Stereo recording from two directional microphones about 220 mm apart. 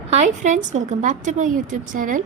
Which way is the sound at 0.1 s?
30° right (ahead or behind).